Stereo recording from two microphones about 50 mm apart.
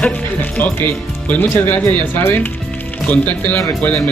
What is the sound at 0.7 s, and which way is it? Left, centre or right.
Speech, left.